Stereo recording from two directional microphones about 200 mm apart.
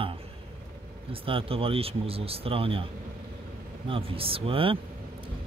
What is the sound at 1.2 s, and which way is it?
Speech, 25° right (ahead or behind).